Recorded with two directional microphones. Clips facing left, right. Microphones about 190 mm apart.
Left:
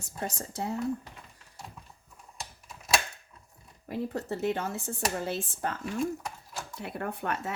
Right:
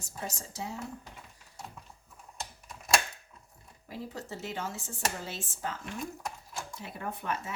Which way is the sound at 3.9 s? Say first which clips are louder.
Left 7 dB; 55° left (ahead or behind).